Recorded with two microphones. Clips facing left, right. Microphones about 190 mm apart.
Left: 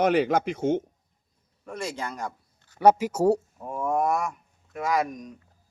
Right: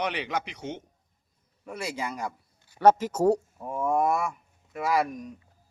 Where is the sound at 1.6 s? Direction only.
10° right (ahead or behind).